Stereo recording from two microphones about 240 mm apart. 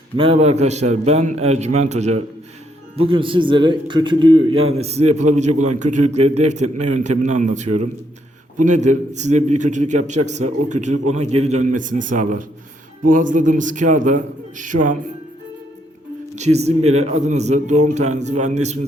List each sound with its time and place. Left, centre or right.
0.2 s a man's voice: right
16.3 s a man's voice: right